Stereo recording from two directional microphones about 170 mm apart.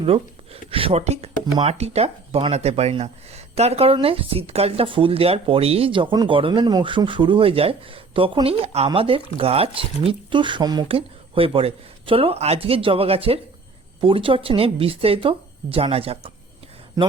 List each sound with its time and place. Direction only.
0.0 s speech: 35° right (ahead or behind)